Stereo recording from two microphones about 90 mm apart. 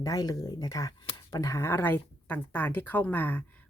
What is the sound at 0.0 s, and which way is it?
Speech, 40° left (ahead or behind).